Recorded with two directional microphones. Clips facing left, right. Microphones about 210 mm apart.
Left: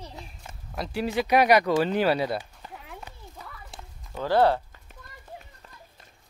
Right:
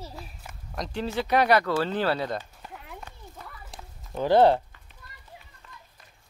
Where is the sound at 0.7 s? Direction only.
10° left (ahead or behind).